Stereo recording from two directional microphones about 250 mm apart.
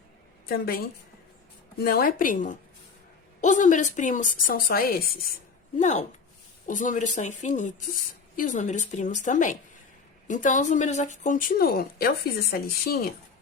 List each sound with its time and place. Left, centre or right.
0.4 s speech: left
1.8 s a woman's voice: left